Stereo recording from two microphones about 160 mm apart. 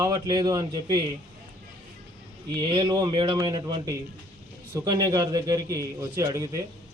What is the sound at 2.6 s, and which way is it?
A man's voice, 25° right (ahead or behind).